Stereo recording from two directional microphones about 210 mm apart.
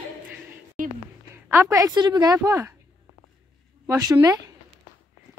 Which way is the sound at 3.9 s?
15° right (ahead or behind).